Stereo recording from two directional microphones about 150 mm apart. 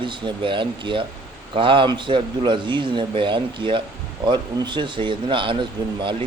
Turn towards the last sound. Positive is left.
turn(degrees=-30)  # may be behind; listen again after turning